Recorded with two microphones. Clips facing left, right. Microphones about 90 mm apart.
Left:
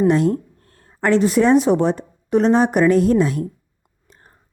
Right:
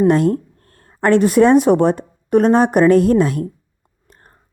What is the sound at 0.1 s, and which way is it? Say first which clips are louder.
A woman's voice: right 2 dB; 50° right (ahead or behind).